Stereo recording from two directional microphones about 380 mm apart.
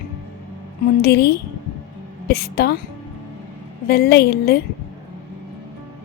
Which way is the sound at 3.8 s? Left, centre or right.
Left.